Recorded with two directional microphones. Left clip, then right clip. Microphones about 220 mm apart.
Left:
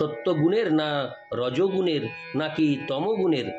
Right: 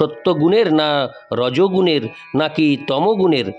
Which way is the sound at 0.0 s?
50° right (ahead or behind).